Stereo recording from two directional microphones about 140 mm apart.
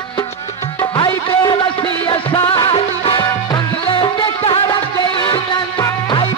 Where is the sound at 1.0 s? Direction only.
30° left (ahead or behind).